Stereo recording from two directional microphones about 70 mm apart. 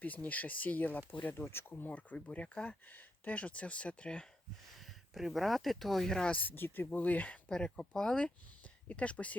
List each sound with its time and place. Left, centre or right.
0.0 s speech: left
1.7 s speech: left
4.8 s speech: centre
6.3 s speech: left